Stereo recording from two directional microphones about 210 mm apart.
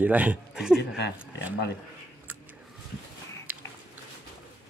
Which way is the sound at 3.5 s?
5° right (ahead or behind).